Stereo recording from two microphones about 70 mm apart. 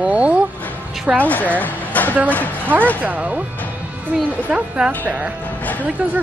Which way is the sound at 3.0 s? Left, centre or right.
Right.